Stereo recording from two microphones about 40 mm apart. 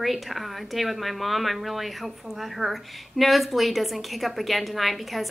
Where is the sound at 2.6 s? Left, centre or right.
Centre.